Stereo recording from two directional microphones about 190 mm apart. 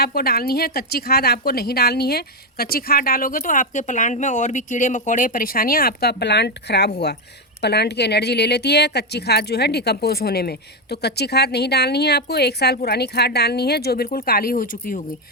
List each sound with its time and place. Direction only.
0.0 s a woman's voice: 55° left (ahead or behind)